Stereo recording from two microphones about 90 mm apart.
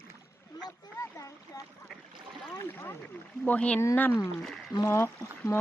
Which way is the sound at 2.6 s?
25° left (ahead or behind).